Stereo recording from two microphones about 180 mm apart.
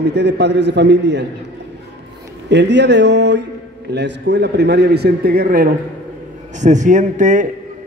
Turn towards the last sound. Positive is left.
turn(degrees=-45)  # may be behind; listen again after turning